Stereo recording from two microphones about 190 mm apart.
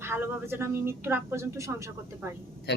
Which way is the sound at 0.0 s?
10° right (ahead or behind).